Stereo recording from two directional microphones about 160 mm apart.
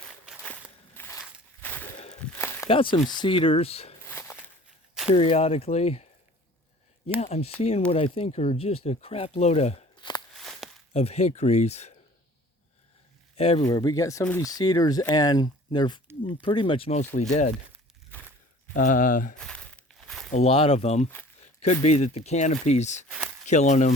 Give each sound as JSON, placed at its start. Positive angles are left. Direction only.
{"t": 0.9, "sound": "walk", "side_deg": 15}
{"t": 2.1, "sound": "a sound", "side_deg": 10}
{"t": 2.6, "sound": "speech", "side_deg": 35}
{"t": 4.0, "sound": "walk", "side_deg": 15}
{"t": 5.1, "sound": "speech", "side_deg": 40}
{"t": 7.2, "sound": "speech", "side_deg": 40}
{"t": 10.9, "sound": "speech", "side_deg": 40}
{"t": 13.3, "sound": "speech", "side_deg": 40}
{"t": 13.7, "sound": "speech", "side_deg": 25}
{"t": 18.7, "sound": "speech", "side_deg": 55}
{"t": 19.4, "sound": "crumpling", "side_deg": 5}
{"t": 20.3, "sound": "speech", "side_deg": 40}